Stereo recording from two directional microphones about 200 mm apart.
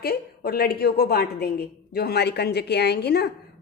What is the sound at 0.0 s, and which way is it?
A woman's voice, 50° left (ahead or behind).